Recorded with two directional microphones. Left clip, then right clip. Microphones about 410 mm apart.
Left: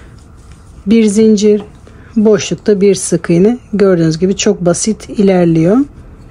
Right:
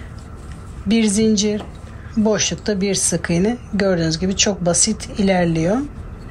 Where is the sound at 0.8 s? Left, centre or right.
Centre.